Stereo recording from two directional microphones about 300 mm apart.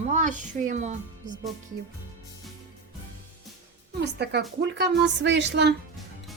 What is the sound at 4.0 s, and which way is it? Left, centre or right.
A woman's voice, right.